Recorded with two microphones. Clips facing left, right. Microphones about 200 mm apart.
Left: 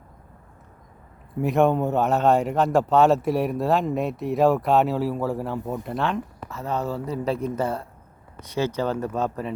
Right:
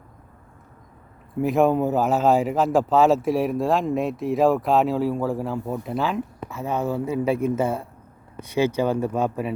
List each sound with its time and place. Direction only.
1.4 s speech: centre (ahead or behind)